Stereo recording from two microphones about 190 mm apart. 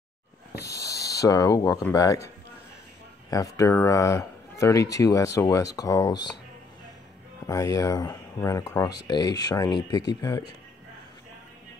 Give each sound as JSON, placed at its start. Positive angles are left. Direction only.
{"t": 0.7, "sound": "speech", "side_deg": 15}
{"t": 3.3, "sound": "speech", "side_deg": 20}
{"t": 7.4, "sound": "speech", "side_deg": 20}